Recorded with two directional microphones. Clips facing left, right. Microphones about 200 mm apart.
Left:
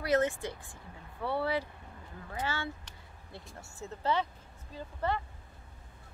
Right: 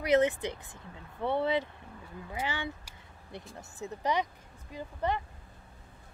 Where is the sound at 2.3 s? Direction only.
15° right (ahead or behind).